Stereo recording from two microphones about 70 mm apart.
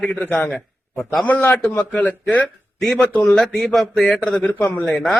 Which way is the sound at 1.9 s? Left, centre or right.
Left.